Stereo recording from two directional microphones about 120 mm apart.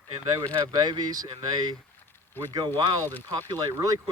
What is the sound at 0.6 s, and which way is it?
Speech, 35° right (ahead or behind).